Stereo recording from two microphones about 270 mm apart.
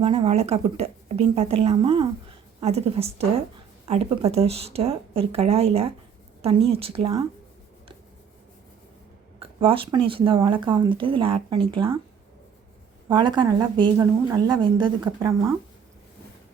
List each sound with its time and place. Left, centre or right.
0.0 s a woman's voice: right
9.6 s a woman's voice: centre
13.1 s a woman's voice: centre